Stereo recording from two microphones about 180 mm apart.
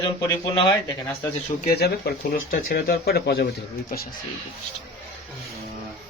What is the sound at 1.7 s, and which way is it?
Speech, 60° left (ahead or behind).